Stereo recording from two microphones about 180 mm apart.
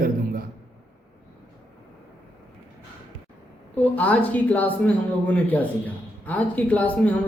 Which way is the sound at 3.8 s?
10° left (ahead or behind).